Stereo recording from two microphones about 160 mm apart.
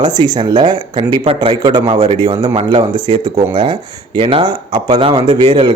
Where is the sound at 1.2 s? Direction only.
35° right (ahead or behind).